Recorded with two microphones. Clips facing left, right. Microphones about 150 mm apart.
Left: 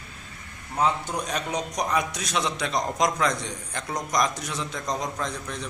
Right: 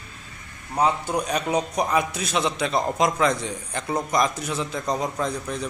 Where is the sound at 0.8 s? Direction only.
10° right (ahead or behind).